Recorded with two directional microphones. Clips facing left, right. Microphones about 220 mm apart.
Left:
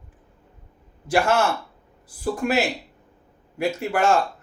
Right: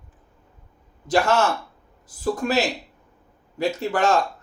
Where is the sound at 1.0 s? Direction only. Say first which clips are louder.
Even; 10° left (ahead or behind).